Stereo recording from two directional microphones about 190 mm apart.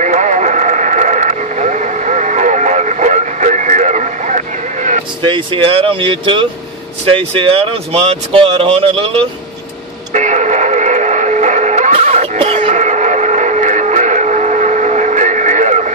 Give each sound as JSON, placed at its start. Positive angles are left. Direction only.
{"t": 0.0, "sound": "radio", "side_deg": -40}
{"t": 5.2, "sound": "speech", "side_deg": -25}
{"t": 10.1, "sound": "music", "side_deg": -40}